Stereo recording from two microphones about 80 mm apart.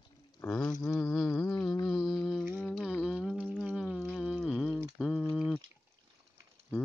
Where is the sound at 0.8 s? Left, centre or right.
Left.